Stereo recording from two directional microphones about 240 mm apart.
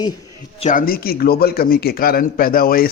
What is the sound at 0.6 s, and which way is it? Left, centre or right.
A man's voice, left.